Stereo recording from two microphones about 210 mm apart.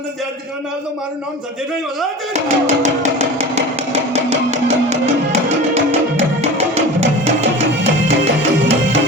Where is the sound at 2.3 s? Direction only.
35° right (ahead or behind).